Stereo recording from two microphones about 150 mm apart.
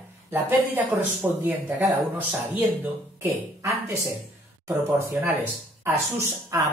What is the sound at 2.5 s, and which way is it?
Speech, 15° right (ahead or behind).